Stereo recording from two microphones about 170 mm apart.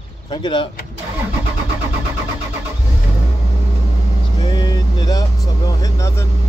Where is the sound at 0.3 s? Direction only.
30° left (ahead or behind).